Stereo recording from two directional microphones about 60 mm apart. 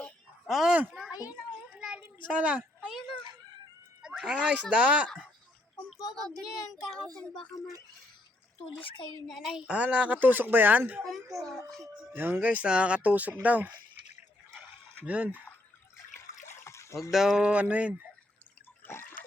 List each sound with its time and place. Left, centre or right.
0.4 s speech: centre
1.8 s a sound: centre
4.2 s speech: centre
5.0 s speech: left
5.9 s child singing: centre
9.2 s a woman's voice: centre
9.6 s speech: centre
11.0 s a woman's voice: centre
12.1 s speech: right
15.0 s speech: right
16.6 s a sound: left
17.1 s speech: centre
17.5 s speech: right